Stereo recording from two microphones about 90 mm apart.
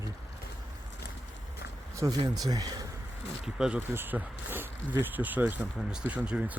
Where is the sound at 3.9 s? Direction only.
20° right (ahead or behind).